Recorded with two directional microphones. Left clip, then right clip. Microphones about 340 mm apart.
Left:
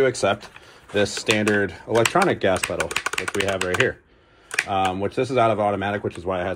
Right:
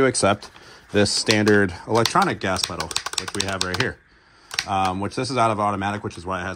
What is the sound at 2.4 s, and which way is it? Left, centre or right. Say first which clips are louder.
Speech: left 3 dB; centre.